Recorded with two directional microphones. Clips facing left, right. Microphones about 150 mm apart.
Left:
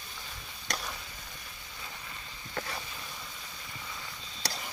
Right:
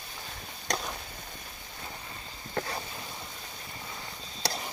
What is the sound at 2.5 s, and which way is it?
Vehicle, 35° right (ahead or behind).